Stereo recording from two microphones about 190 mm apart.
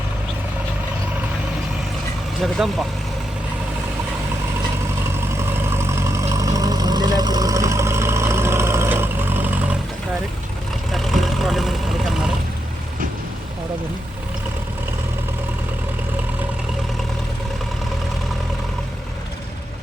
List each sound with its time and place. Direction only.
2.4 s speech: centre (ahead or behind)
5.5 s vehicle: 15° right (ahead or behind)
10.9 s vehicle: centre (ahead or behind)